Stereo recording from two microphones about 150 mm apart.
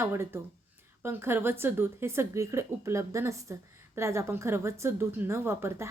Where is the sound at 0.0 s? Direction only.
15° right (ahead or behind).